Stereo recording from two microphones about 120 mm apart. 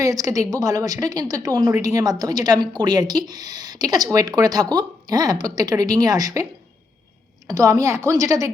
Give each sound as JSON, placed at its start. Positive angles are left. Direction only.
{"t": 0.0, "sound": "a woman's voice", "side_deg": -30}